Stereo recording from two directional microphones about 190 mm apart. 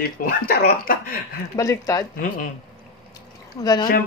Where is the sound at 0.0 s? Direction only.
55° left (ahead or behind).